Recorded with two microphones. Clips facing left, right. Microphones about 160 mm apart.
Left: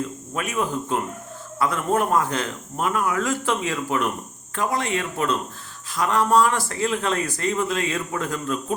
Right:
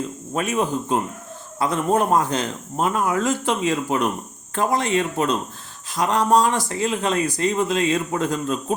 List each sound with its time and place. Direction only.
0.3 s a man's voice: 25° right (ahead or behind)